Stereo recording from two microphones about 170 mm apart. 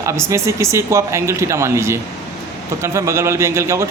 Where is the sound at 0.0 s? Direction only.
15° right (ahead or behind).